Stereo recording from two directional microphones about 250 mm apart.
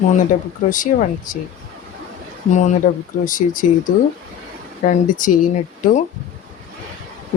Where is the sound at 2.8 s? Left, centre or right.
Left.